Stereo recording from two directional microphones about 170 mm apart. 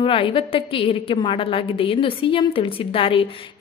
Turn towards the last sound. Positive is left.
turn(degrees=35)  # may be behind; listen again after turning